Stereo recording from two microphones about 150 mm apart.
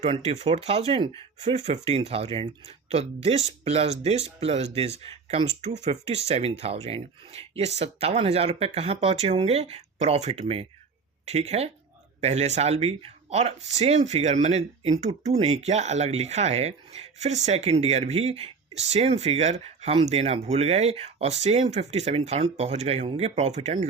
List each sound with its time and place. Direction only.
0.0 s speech: 40° right (ahead or behind)